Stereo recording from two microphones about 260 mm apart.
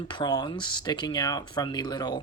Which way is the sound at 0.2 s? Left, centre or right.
Centre.